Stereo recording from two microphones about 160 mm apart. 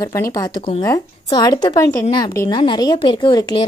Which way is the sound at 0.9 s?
25° left (ahead or behind).